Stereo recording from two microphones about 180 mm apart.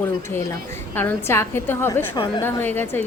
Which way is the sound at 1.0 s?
10° left (ahead or behind).